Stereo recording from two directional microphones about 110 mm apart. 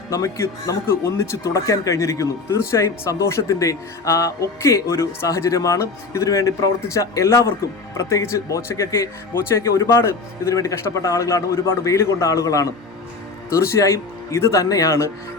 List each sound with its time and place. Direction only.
0.1 s speech: 25° left (ahead or behind)